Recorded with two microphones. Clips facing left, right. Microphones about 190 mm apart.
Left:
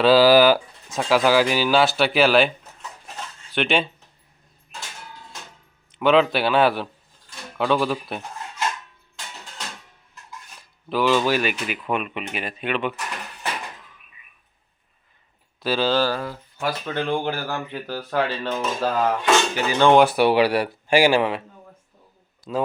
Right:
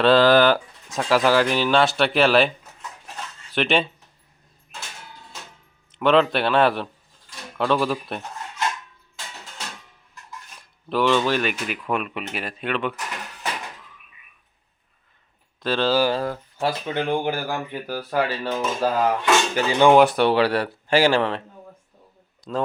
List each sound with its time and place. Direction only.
0.0 s speech: 5° left (ahead or behind)
3.5 s speech: centre (ahead or behind)
6.0 s speech: centre (ahead or behind)
10.6 s speech: centre (ahead or behind)
15.6 s speech: 5° left (ahead or behind)
15.9 s speech: 10° right (ahead or behind)
19.9 s speech: centre (ahead or behind)